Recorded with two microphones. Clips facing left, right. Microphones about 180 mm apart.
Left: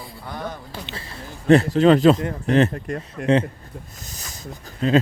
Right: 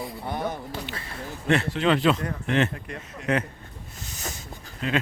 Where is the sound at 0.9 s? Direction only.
30° left (ahead or behind).